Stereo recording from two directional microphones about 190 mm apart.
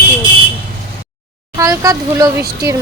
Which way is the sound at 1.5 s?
15° right (ahead or behind).